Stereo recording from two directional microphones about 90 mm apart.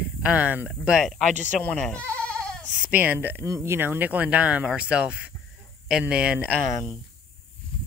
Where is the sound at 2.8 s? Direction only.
20° right (ahead or behind).